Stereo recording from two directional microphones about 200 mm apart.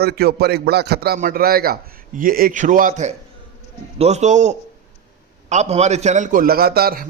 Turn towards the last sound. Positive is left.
turn(degrees=-50)  # may be behind; listen again after turning